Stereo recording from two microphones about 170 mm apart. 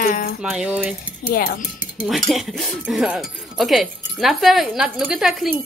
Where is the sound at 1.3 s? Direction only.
60° left (ahead or behind).